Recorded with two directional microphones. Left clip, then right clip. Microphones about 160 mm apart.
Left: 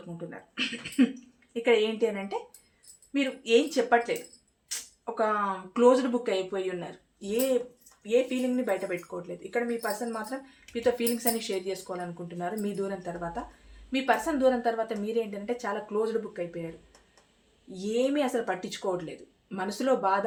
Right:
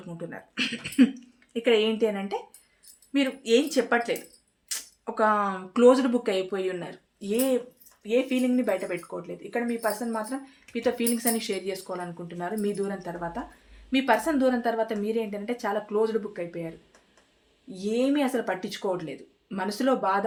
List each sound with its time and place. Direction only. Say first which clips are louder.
0.3 s speech: right 3 dB; 80° right
1.5 s speech: right 2 dB; 55° right (ahead or behind)
3.1 s speech: right 1 dB; 65° right (ahead or behind); by 16.4 s 45° right (ahead or behind)
17.9 s speech: right 1 dB; 45° right (ahead or behind)